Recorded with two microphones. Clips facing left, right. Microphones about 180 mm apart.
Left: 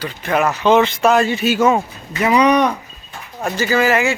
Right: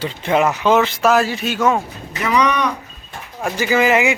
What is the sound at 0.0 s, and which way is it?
Speech, 25° right (ahead or behind).